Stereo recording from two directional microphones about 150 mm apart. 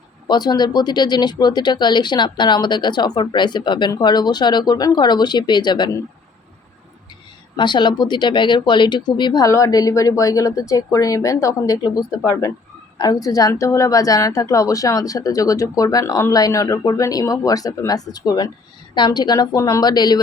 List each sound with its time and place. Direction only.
0.3 s speech: 30° left (ahead or behind)
7.5 s speech: 30° left (ahead or behind)